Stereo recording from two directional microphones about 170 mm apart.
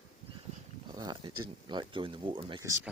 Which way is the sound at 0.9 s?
25° right (ahead or behind).